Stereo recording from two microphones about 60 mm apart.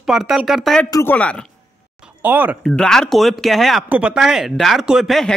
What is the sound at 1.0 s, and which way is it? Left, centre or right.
Speech, left.